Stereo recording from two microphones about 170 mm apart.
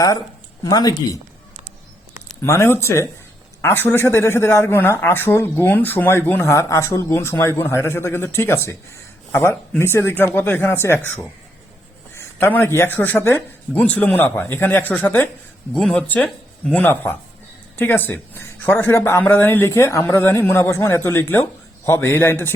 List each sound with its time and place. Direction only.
0.6 s speech: 20° left (ahead or behind)
2.4 s speech: 15° left (ahead or behind)